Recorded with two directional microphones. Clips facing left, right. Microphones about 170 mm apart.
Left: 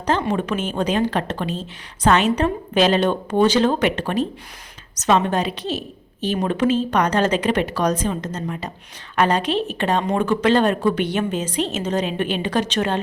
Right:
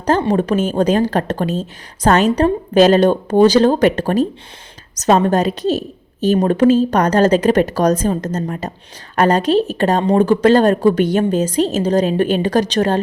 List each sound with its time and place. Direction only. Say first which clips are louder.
0.0 s a woman's voice: right 6 dB; 40° right (ahead or behind)